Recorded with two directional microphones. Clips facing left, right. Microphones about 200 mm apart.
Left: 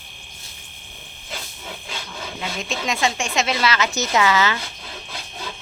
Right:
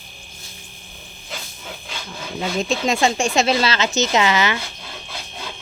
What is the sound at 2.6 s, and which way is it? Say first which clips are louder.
Speech: right 5 dB; 35° right (ahead or behind).